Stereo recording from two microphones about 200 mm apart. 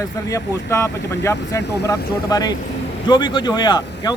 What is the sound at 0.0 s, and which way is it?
Speech, 15° left (ahead or behind).